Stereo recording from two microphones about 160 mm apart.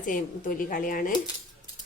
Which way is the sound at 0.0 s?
55° left (ahead or behind).